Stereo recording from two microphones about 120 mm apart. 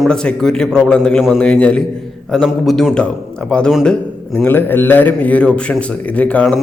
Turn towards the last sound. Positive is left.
turn(degrees=10)  # may be behind; listen again after turning